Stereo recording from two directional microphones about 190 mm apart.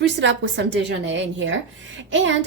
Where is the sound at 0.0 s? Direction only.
70° right (ahead or behind).